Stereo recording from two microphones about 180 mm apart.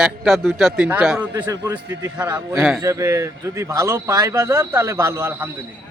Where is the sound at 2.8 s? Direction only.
15° right (ahead or behind).